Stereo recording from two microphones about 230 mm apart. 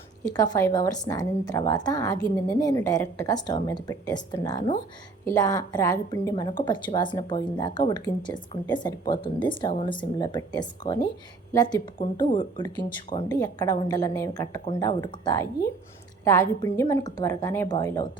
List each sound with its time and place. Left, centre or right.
0.3 s a woman's voice: centre